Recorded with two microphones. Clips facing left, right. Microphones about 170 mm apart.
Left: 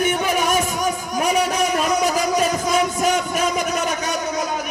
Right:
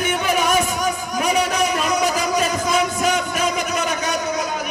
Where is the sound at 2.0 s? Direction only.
45° left (ahead or behind).